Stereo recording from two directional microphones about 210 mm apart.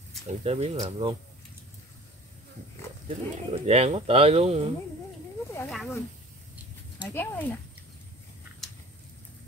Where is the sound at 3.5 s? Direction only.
30° right (ahead or behind).